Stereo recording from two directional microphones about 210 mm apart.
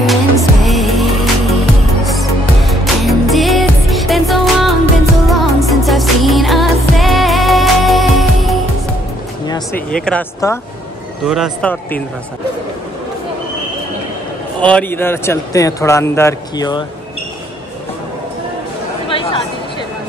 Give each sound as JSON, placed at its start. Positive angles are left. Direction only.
{"t": 0.0, "sound": "music", "side_deg": 0}
{"t": 9.5, "sound": "vehicle", "side_deg": 10}
{"t": 10.4, "sound": "speech", "side_deg": 15}
{"t": 11.2, "sound": "a man's voice", "side_deg": 0}
{"t": 14.6, "sound": "speech", "side_deg": 5}
{"t": 19.0, "sound": "chatter", "side_deg": 25}